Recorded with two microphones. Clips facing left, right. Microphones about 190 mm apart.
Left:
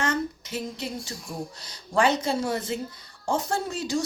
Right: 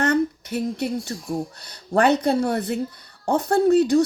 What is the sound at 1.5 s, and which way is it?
A woman's voice, 60° right (ahead or behind).